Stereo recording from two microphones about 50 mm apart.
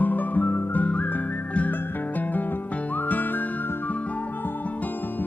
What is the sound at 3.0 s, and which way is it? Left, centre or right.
Music, left.